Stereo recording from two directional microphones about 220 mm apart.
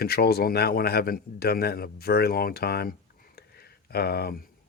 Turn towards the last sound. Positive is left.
turn(degrees=45)  # may be behind; listen again after turning